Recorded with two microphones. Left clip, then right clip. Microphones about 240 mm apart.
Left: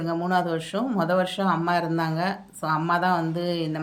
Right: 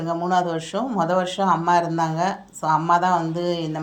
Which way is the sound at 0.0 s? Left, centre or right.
Centre.